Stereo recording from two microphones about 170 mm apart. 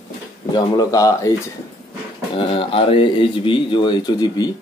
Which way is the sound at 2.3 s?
30° left (ahead or behind).